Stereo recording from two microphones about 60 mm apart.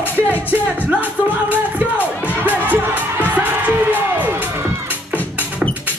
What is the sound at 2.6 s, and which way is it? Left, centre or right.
Music, right.